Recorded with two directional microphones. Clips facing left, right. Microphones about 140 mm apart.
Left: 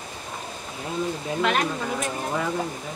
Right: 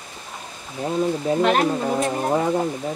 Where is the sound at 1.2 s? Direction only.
35° right (ahead or behind).